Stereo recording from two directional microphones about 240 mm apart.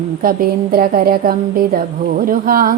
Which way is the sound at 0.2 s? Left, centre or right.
Right.